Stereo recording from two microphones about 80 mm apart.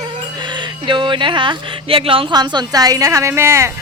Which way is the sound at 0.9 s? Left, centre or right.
Right.